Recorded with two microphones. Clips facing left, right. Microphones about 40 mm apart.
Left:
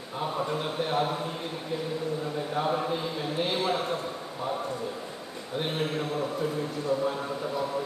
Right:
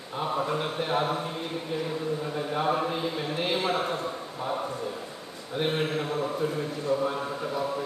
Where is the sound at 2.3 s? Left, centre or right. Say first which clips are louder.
Right 2 dB; centre.